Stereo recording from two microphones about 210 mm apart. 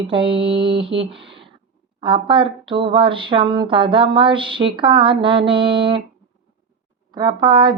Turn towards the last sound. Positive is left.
turn(degrees=-20)  # may be behind; listen again after turning